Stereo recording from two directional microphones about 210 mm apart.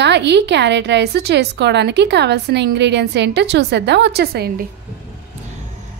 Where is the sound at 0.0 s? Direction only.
55° right (ahead or behind).